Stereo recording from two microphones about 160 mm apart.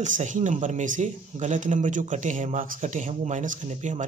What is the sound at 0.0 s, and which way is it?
Speech, 50° right (ahead or behind).